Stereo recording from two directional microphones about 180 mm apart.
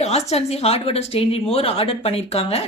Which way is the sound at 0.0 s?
35° left (ahead or behind).